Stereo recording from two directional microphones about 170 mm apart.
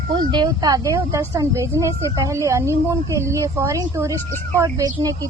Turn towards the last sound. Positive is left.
turn(degrees=-20)  # may be behind; listen again after turning